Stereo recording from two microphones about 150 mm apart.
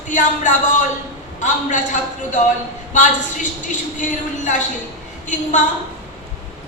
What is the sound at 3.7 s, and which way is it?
A woman's voice, 55° left (ahead or behind).